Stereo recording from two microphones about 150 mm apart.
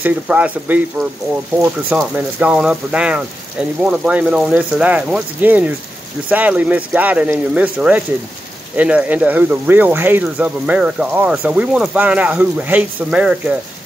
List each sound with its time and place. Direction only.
0.0 s speech: 10° right (ahead or behind)